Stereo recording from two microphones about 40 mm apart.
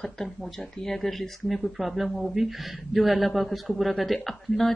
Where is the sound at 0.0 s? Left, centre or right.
Centre.